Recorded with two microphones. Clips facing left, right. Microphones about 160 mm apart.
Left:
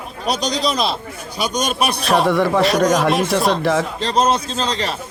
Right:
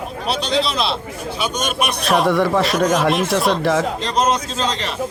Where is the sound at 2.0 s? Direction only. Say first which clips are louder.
Even; centre (ahead or behind).